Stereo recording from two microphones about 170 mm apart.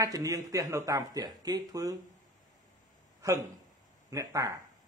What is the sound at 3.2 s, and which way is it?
Speech, 20° right (ahead or behind).